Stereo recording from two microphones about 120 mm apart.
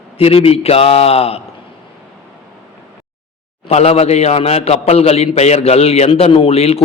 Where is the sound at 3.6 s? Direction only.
60° left (ahead or behind).